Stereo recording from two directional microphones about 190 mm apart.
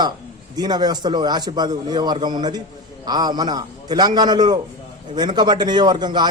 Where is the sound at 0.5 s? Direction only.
20° right (ahead or behind).